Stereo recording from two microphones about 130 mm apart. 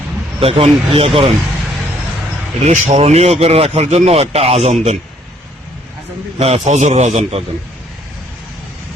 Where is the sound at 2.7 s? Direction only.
55° right (ahead or behind).